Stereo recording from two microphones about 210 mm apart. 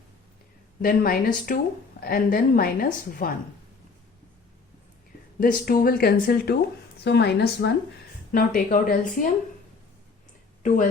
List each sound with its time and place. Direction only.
0.8 s a woman's voice: 45° left (ahead or behind)
5.4 s a woman's voice: 45° left (ahead or behind)
10.6 s speech: 40° left (ahead or behind)